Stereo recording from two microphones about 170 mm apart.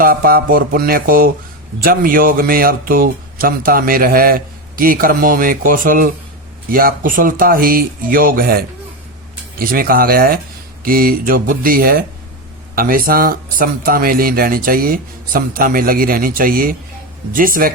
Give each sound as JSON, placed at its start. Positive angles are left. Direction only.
{"t": 0.0, "sound": "speech", "side_deg": -60}